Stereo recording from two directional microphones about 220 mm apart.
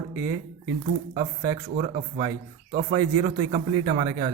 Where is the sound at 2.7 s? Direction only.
40° right (ahead or behind).